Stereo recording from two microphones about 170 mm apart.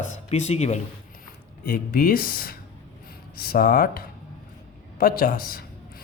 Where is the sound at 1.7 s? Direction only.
60° left (ahead or behind).